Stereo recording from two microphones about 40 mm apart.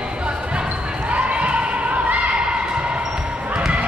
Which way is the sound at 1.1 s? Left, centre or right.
Right.